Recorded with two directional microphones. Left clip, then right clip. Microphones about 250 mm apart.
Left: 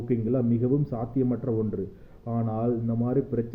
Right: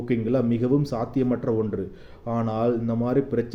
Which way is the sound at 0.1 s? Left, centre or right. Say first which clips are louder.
Right 3 dB; centre.